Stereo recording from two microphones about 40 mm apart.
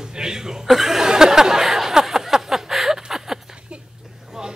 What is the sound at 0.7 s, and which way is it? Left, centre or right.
Speech, centre.